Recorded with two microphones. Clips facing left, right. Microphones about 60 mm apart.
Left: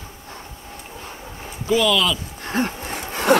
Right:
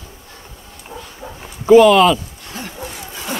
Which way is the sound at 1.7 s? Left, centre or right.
Right.